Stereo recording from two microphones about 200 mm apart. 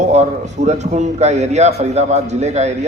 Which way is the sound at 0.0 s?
35° right (ahead or behind).